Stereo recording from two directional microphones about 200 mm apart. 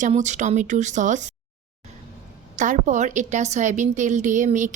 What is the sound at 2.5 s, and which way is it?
Speech, 40° right (ahead or behind).